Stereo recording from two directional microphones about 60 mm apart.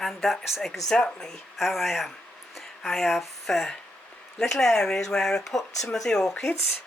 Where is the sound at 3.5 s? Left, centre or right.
Centre.